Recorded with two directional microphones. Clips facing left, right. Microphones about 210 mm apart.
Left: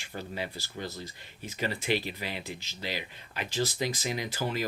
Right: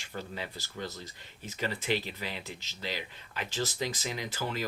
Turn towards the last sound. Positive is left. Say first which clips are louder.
# left 3 dB
turn(degrees=15)  # may be behind; listen again after turning